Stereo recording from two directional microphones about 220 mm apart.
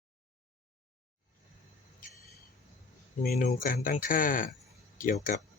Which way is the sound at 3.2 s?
45° left (ahead or behind).